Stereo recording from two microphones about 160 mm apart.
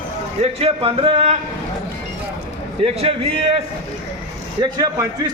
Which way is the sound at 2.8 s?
35° right (ahead or behind).